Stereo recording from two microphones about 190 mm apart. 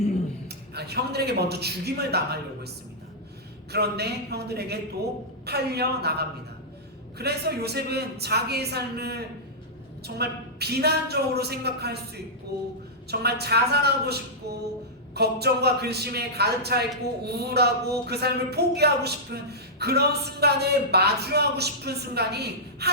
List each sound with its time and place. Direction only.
0.4 s a man's voice: 60° right (ahead or behind)
3.7 s a woman's voice: 60° right (ahead or behind)